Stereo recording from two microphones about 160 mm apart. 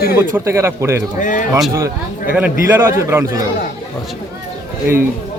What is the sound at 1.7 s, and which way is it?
A man's voice, 15° right (ahead or behind).